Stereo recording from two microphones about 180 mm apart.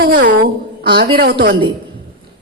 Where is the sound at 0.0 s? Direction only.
55° right (ahead or behind).